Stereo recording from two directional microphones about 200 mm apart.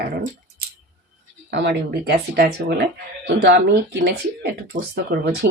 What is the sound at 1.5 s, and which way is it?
Speech, 60° right (ahead or behind).